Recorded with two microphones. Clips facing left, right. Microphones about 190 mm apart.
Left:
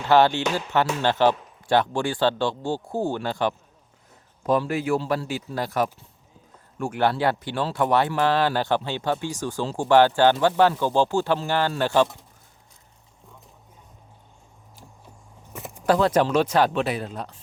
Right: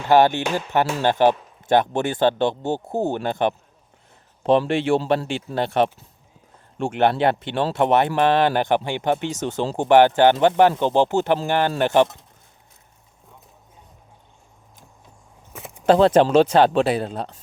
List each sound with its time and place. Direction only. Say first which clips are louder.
0.1 s speech: right 2 dB; 15° right (ahead or behind)
4.9 s speech: right 4 dB; 30° right (ahead or behind)
15.5 s keys jangling: left 1 dB; centre (ahead or behind)
15.9 s speech: right 5 dB; 25° right (ahead or behind)